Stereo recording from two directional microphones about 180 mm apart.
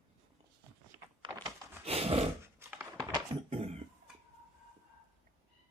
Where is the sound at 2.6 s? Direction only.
10° right (ahead or behind).